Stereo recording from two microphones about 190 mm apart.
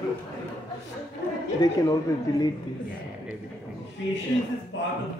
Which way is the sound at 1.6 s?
20° left (ahead or behind).